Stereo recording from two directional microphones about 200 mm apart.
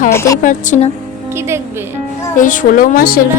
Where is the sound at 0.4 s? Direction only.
40° left (ahead or behind).